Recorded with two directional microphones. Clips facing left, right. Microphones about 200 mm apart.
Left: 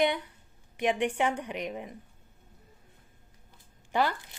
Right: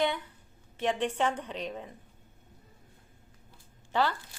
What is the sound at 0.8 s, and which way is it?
Speech, 15° left (ahead or behind).